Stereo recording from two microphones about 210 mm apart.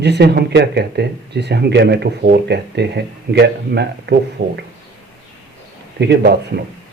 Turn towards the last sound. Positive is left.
turn(degrees=-50)  # may be behind; listen again after turning